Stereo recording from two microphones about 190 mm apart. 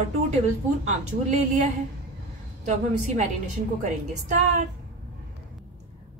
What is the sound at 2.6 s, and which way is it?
Speech, 40° right (ahead or behind).